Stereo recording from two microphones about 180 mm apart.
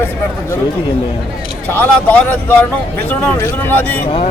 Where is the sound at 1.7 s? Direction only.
10° left (ahead or behind).